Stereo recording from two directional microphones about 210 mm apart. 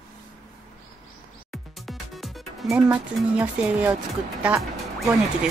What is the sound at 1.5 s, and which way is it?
Music, centre (ahead or behind).